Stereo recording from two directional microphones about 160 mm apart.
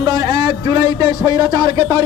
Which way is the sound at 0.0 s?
20° right (ahead or behind).